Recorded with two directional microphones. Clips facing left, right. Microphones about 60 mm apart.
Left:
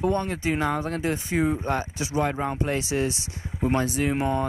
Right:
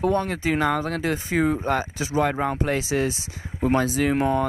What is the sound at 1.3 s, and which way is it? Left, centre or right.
Speech, right.